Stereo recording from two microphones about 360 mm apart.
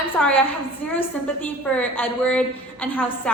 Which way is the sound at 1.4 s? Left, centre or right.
Centre.